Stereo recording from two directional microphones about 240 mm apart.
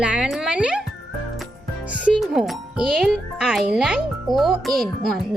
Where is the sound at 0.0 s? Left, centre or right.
Centre.